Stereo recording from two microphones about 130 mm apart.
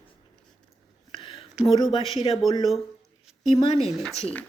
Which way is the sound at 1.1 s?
40° left (ahead or behind).